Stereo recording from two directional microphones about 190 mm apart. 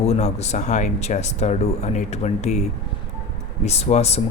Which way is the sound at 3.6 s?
35° left (ahead or behind).